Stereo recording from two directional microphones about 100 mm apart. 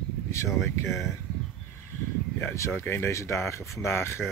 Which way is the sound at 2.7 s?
25° left (ahead or behind).